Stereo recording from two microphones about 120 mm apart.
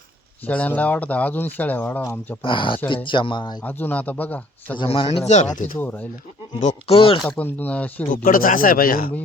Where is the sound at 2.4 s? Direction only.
45° left (ahead or behind).